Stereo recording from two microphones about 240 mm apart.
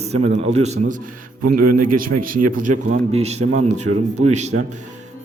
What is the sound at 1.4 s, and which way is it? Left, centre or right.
Speech, right.